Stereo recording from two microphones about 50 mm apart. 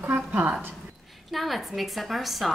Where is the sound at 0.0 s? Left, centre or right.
Right.